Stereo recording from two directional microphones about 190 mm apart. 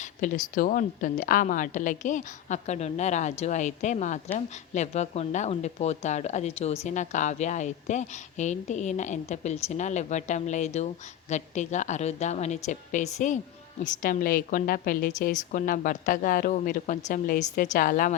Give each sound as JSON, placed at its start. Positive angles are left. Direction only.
{"t": 0.0, "sound": "a woman's voice", "side_deg": 40}